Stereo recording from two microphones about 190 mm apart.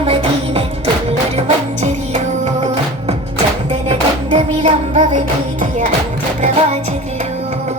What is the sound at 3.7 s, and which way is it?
Music, 30° right (ahead or behind).